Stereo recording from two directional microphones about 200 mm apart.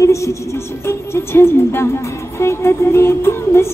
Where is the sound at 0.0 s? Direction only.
15° left (ahead or behind).